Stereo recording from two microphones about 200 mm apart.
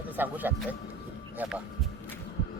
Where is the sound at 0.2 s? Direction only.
10° right (ahead or behind).